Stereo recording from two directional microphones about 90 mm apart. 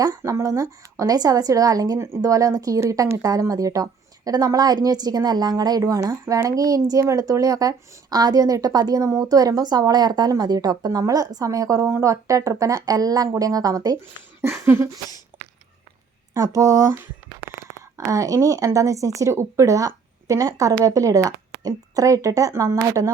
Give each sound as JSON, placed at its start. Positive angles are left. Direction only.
{"t": 0.0, "sound": "a woman's voice", "side_deg": -40}
{"t": 14.4, "sound": "a sound", "side_deg": -25}
{"t": 15.3, "sound": "sneeze", "side_deg": -25}
{"t": 16.3, "sound": "a woman's voice", "side_deg": -35}
{"t": 17.9, "sound": "a woman's voice", "side_deg": -35}